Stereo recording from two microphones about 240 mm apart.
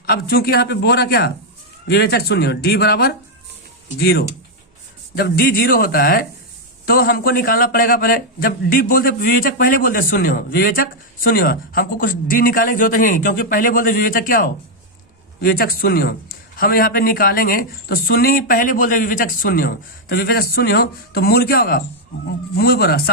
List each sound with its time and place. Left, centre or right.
0.1 s a man's voice: left